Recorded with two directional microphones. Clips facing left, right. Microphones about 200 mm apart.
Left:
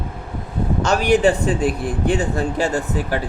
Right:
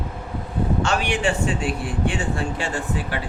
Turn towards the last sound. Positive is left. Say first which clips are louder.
# left 5 dB
turn(degrees=40)  # may be behind; listen again after turning